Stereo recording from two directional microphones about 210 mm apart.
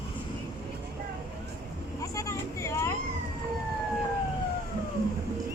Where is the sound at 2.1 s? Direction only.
15° left (ahead or behind).